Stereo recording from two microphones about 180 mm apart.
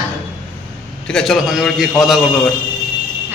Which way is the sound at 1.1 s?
Centre (ahead or behind).